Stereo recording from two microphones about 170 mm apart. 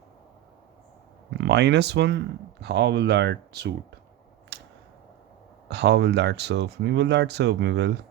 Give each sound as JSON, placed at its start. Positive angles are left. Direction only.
{"t": 1.4, "sound": "speech", "side_deg": -85}
{"t": 4.5, "sound": "a sound", "side_deg": -80}
{"t": 5.6, "sound": "speech", "side_deg": -75}